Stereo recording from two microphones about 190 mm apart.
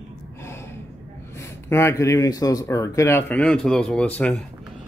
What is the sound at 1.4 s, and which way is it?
Speech, 15° left (ahead or behind).